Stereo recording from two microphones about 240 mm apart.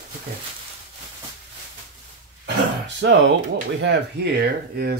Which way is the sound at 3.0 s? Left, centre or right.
Right.